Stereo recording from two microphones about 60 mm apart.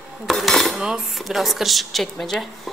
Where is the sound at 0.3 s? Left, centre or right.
Centre.